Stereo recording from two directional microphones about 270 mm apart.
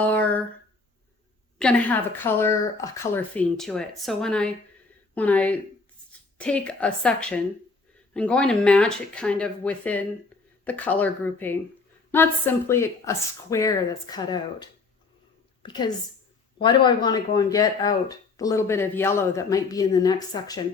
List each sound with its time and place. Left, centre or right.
0.0 s a sound: centre
1.5 s speech: centre
15.6 s a woman's voice: centre